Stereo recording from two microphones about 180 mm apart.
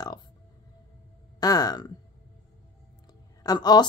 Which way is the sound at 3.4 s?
20° left (ahead or behind).